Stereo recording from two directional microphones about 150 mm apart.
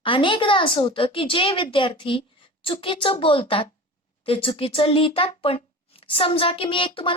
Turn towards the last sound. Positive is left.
turn(degrees=35)  # may be behind; listen again after turning